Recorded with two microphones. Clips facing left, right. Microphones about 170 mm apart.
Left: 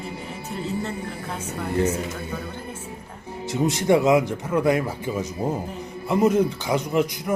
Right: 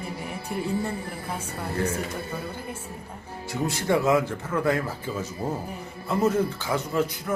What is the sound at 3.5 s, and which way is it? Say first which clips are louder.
Speech: left 5 dB; 20° left (ahead or behind).